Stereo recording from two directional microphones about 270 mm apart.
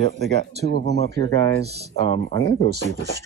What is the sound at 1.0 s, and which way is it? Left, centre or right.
Speech, right.